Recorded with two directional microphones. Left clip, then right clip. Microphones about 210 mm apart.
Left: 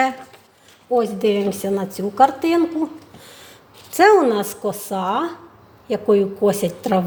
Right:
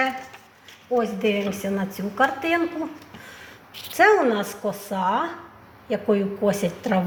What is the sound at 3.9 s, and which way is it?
A woman's voice, 65° left (ahead or behind).